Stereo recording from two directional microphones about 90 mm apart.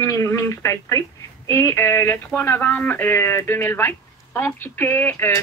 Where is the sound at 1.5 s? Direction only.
30° left (ahead or behind).